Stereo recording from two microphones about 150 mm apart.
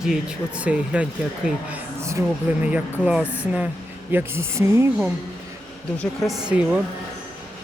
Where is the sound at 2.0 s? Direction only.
20° right (ahead or behind).